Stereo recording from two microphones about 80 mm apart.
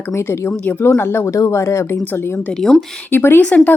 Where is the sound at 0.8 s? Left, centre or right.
Left.